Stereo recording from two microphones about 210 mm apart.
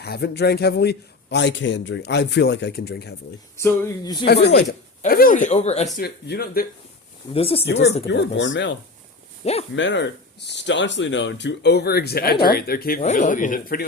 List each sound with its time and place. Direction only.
0.0 s speech: 50° left (ahead or behind)
3.6 s a sound: 15° left (ahead or behind)
4.3 s speech: 50° left (ahead or behind); by 5.9 s 30° left (ahead or behind)
6.0 s speech: 50° left (ahead or behind)
7.3 s speech: 25° left (ahead or behind)
7.6 s speech: 55° left (ahead or behind)
9.4 s speech: 30° left (ahead or behind)
9.7 s speech: 60° left (ahead or behind)
13.0 s speech: 35° left (ahead or behind)